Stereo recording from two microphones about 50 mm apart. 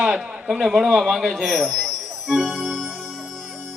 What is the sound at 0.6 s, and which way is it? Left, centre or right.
Music, centre.